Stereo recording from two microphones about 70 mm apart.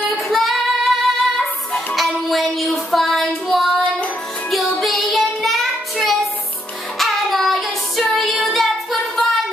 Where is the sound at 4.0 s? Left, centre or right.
Centre.